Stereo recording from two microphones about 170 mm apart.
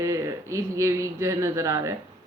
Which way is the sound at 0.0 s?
20° right (ahead or behind).